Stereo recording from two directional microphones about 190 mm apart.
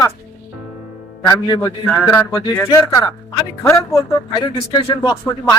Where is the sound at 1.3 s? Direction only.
20° left (ahead or behind).